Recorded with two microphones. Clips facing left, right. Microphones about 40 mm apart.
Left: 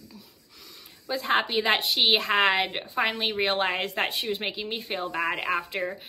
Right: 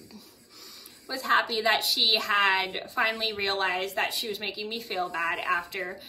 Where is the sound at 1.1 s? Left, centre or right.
Left.